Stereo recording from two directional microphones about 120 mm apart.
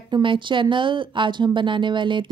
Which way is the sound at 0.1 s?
45° right (ahead or behind).